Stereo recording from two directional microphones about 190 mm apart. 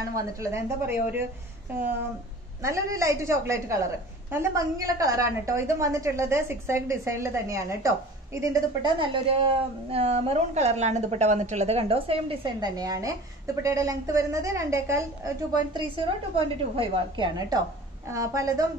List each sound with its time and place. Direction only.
0.1 s a woman's voice: 15° right (ahead or behind)
2.6 s a woman's voice: 15° right (ahead or behind)
9.0 s a woman's voice: 25° right (ahead or behind)
16.3 s a woman's voice: 25° right (ahead or behind)
18.0 s a woman's voice: 15° right (ahead or behind)